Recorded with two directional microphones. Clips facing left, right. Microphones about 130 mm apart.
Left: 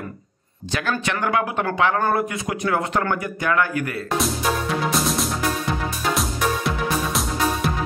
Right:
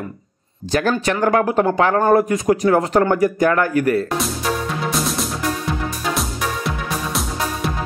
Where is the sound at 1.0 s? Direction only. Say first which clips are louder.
Right 6 dB; 35° right (ahead or behind).